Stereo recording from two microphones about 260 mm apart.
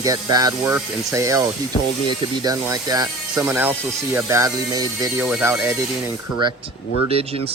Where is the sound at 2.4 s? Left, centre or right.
Centre.